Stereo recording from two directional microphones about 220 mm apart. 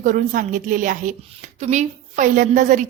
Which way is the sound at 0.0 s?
35° right (ahead or behind).